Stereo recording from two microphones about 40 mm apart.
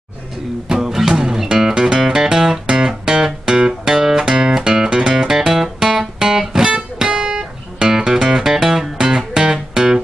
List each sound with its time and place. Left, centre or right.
0.7 s music: centre
1.7 s music: right
2.6 s music: right
2.9 s music: centre